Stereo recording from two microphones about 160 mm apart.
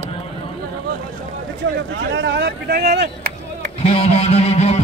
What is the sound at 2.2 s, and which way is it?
Speech, 90° right.